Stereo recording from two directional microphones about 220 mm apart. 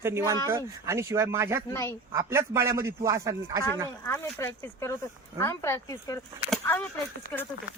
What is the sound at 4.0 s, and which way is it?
Speech, 10° left (ahead or behind).